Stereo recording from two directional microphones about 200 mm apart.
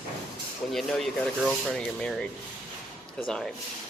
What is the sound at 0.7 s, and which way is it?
Speech, centre (ahead or behind).